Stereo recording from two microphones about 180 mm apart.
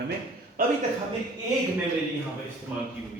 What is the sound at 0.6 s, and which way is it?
Speech, 50° right (ahead or behind).